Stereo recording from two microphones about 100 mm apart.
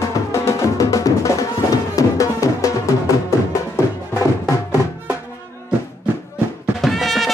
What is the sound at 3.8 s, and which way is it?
Music, 30° left (ahead or behind).